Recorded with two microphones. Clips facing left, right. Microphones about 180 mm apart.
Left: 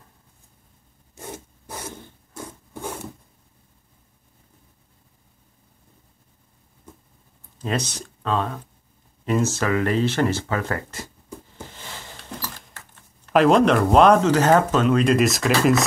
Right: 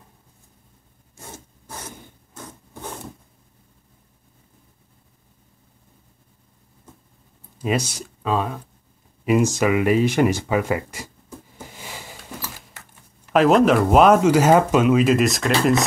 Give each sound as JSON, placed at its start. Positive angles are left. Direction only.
{"t": 1.3, "sound": "a sound", "side_deg": 10}
{"t": 2.3, "sound": "rub", "side_deg": 10}
{"t": 7.5, "sound": "speech", "side_deg": -10}
{"t": 11.6, "sound": "keys jangling", "side_deg": -10}